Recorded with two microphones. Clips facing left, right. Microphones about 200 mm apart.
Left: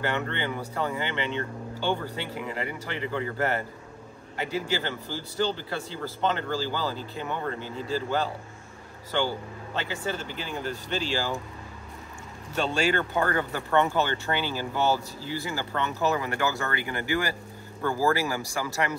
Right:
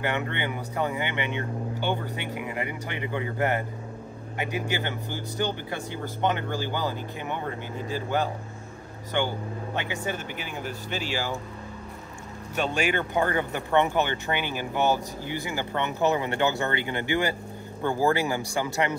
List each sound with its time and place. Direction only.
0.0 s speech: 15° right (ahead or behind)
12.5 s speech: 15° right (ahead or behind)